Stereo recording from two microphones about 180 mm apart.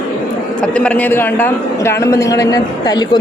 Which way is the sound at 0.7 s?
5° left (ahead or behind).